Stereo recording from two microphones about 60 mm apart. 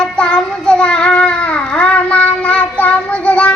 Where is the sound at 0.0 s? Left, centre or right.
Centre.